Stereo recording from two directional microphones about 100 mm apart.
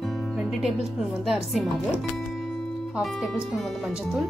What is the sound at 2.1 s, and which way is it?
Music, centre (ahead or behind).